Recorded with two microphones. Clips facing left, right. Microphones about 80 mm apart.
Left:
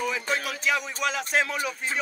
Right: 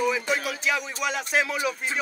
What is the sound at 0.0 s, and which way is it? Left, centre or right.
Music, centre.